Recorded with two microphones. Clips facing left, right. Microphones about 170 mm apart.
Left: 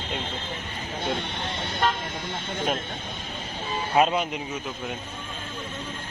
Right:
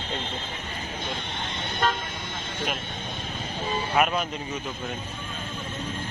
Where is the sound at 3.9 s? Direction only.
20° left (ahead or behind).